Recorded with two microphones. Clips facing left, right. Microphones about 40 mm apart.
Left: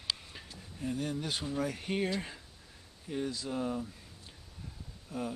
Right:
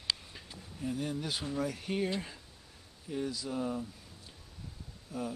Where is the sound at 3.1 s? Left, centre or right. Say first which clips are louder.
Even; centre.